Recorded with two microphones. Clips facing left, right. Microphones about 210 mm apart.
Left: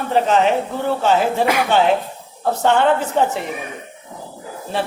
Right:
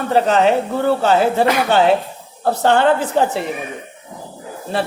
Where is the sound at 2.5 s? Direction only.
35° right (ahead or behind).